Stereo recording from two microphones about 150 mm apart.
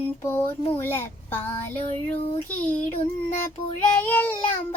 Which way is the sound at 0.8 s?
15° left (ahead or behind).